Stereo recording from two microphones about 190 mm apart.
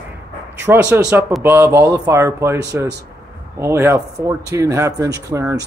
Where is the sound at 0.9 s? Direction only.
10° right (ahead or behind).